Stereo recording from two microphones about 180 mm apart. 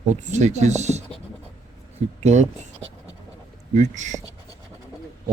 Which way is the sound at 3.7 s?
40° right (ahead or behind).